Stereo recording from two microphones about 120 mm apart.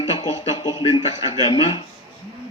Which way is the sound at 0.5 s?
35° left (ahead or behind).